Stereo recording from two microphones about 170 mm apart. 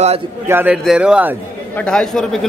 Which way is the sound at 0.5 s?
10° right (ahead or behind).